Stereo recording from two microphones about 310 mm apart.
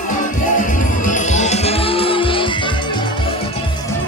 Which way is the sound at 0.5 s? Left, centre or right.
Left.